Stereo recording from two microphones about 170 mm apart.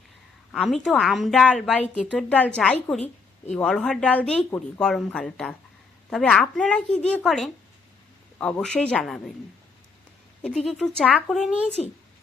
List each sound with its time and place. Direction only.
0.5 s speech: centre (ahead or behind)
2.1 s a woman's voice: 10° left (ahead or behind)
10.4 s speech: centre (ahead or behind)